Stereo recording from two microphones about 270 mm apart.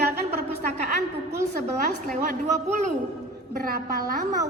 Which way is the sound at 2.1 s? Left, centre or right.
Right.